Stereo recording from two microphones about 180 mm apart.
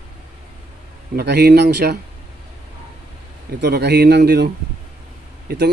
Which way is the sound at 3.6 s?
65° right (ahead or behind).